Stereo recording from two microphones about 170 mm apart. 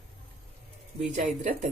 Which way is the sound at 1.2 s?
45° right (ahead or behind).